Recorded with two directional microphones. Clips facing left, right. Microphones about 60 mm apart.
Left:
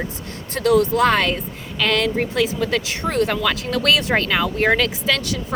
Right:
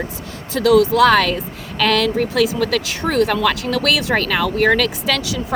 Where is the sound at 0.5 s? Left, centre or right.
Right.